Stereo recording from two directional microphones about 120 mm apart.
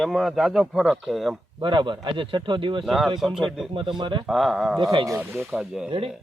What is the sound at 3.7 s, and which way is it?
Speech, 45° right (ahead or behind).